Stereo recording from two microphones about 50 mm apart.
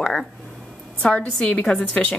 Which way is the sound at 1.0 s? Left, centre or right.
Left.